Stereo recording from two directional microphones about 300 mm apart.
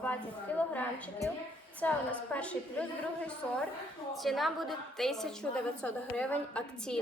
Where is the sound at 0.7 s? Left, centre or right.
Centre.